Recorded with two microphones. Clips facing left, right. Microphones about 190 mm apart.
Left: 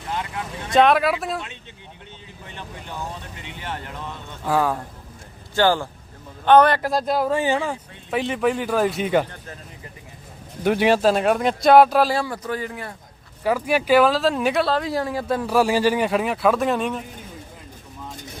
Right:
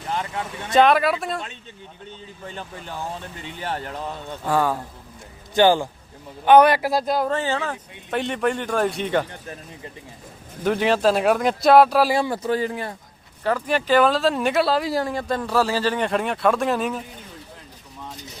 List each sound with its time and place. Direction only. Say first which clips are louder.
0.1 s vehicle: right 1 dB; 30° right (ahead or behind)
0.7 s speech: even; centre (ahead or behind)
3.4 s speech: right 4 dB; 35° right (ahead or behind)
4.4 s speech: even; centre (ahead or behind)
5.5 s speech: right 3 dB; 15° right (ahead or behind); by 7.3 s centre (ahead or behind)
7.3 s speech: left 3 dB; 15° left (ahead or behind)
8.1 s speech: left 1 dB; centre (ahead or behind)
10.6 s speech: left 2 dB; 10° left (ahead or behind)
12.0 s speech: right 2 dB; 15° right (ahead or behind)
12.3 s speech: right 5 dB; 30° right (ahead or behind)
13.4 s speech: left 2 dB; 10° left (ahead or behind)